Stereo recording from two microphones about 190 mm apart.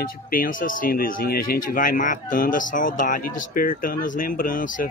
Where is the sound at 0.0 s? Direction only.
50° left (ahead or behind).